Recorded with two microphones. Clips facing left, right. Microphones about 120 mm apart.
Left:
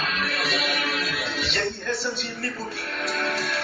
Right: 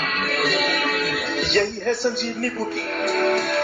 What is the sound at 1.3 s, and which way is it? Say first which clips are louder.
Speech: right 10 dB; 50° right (ahead or behind).